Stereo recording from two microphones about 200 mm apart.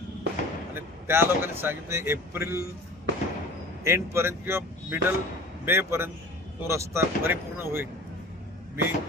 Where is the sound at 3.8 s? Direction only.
15° right (ahead or behind).